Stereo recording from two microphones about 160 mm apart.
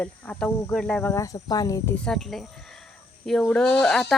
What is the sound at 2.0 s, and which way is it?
Speech, 5° left (ahead or behind).